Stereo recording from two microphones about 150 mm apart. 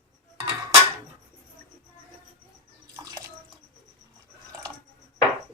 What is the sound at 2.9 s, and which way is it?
Bathtub, 25° right (ahead or behind).